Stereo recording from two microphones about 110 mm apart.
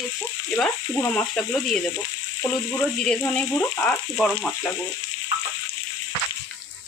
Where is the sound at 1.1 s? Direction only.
10° left (ahead or behind).